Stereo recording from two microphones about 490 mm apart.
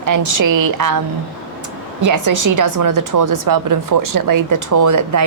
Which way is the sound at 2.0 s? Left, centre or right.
Right.